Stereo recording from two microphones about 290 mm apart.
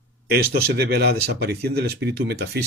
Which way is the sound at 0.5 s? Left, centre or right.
Right.